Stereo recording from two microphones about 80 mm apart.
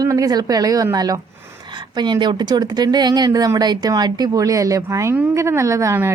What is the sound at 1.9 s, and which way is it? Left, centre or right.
Speech, right.